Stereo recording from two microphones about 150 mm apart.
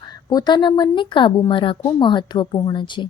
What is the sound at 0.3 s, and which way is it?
A woman's voice, 30° left (ahead or behind).